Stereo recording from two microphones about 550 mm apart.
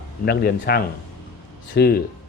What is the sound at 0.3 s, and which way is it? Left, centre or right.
Speech, centre.